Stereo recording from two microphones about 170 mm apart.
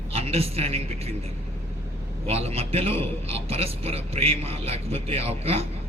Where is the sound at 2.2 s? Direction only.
35° right (ahead or behind).